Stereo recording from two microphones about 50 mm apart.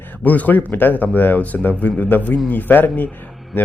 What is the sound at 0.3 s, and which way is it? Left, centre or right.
Speech, left.